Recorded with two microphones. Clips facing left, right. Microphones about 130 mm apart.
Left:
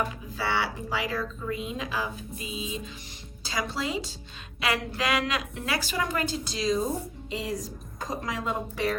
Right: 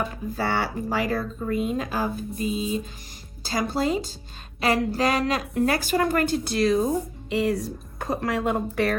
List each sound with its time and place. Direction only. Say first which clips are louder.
0.3 s speech: right 3 dB; 45° right (ahead or behind)